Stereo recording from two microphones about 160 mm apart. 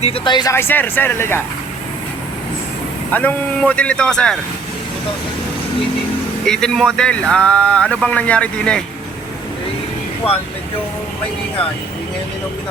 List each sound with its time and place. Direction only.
0.0 s speech: 30° left (ahead or behind)
0.5 s speech: 15° left (ahead or behind)
3.1 s speech: 10° left (ahead or behind)
6.4 s speech: 5° left (ahead or behind)